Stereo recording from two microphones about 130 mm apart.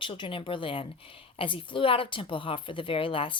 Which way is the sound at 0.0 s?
40° left (ahead or behind).